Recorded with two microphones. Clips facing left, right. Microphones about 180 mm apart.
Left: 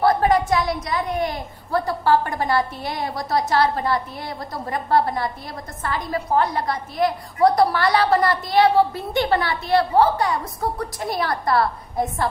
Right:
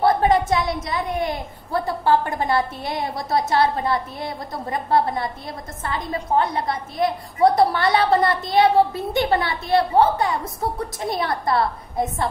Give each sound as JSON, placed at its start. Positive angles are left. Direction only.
{"t": 0.0, "sound": "a woman's voice", "side_deg": -25}